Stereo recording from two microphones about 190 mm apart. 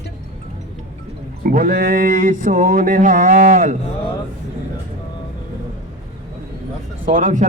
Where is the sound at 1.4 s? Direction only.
50° right (ahead or behind).